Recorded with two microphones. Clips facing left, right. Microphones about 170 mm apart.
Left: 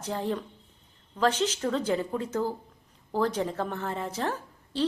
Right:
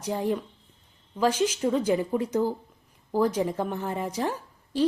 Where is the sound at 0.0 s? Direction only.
15° right (ahead or behind).